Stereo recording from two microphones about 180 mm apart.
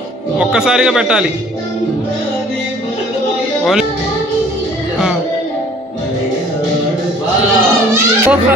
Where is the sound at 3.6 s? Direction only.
Centre (ahead or behind).